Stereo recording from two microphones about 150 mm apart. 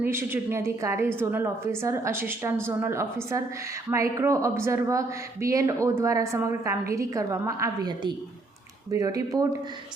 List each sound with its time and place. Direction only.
0.0 s a woman's voice: 15° right (ahead or behind)